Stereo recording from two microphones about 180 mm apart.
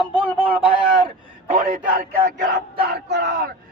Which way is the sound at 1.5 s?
45° right (ahead or behind).